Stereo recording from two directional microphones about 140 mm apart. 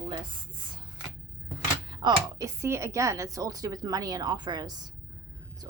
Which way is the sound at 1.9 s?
30° right (ahead or behind).